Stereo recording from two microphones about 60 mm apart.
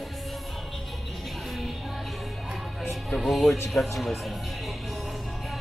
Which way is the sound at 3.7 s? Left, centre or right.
Centre.